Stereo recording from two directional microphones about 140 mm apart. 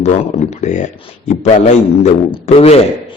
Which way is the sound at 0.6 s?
60° left (ahead or behind).